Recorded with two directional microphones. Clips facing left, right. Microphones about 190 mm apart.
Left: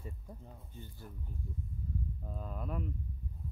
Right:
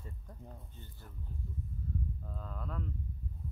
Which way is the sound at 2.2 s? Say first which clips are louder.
Left 2 dB; 15° left (ahead or behind).